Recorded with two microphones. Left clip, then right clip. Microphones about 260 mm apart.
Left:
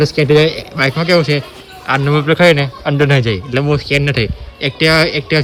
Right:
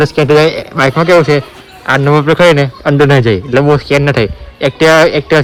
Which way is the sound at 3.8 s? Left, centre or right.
Centre.